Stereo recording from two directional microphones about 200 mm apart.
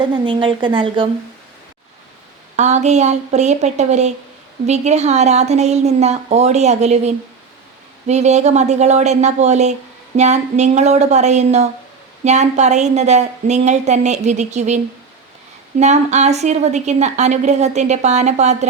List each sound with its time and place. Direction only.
0.3 s a woman's voice: 25° right (ahead or behind)
2.6 s a woman's voice: 35° right (ahead or behind)
15.8 s a woman's voice: 35° right (ahead or behind)